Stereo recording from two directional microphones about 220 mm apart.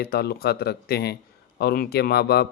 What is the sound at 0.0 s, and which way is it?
Speech, 45° left (ahead or behind).